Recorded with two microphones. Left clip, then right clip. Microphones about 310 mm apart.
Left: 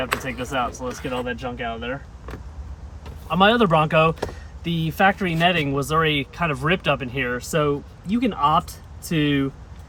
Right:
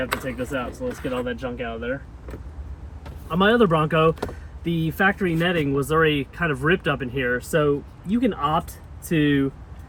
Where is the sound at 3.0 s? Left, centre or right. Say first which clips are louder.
Left 4 dB; centre.